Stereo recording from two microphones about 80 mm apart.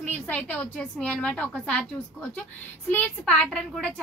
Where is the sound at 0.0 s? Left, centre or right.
Centre.